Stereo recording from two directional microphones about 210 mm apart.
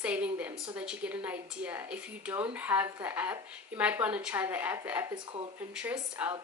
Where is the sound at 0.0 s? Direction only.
5° right (ahead or behind).